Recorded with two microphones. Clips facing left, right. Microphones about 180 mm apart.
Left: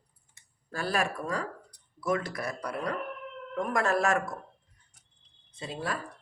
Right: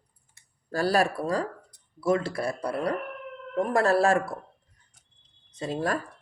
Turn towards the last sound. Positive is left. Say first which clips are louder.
# right 7 dB
turn(degrees=-45)  # may be behind; listen again after turning